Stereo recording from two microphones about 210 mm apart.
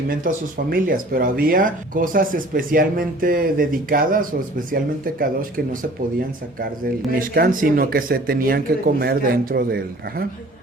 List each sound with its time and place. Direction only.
0.1 s speech: 40° right (ahead or behind)
6.1 s speech: 45° right (ahead or behind)